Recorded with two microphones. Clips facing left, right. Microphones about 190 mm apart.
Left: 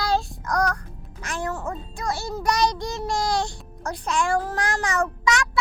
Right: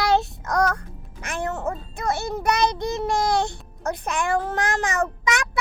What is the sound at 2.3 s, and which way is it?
Child singing, 60° right (ahead or behind).